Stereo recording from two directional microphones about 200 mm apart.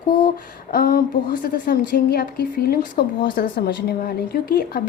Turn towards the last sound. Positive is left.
turn(degrees=50)  # may be behind; listen again after turning